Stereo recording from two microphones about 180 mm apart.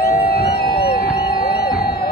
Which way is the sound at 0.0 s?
60° left (ahead or behind).